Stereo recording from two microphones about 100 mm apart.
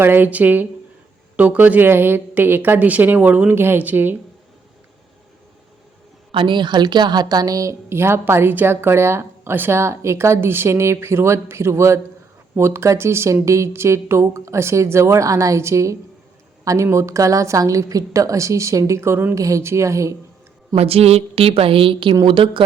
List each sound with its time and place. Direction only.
0.0 s a woman's voice: 20° right (ahead or behind)
6.3 s a woman's voice: 55° right (ahead or behind); by 20.1 s 30° right (ahead or behind)
20.7 s a woman's voice: 90° right; by 22.6 s 60° right (ahead or behind)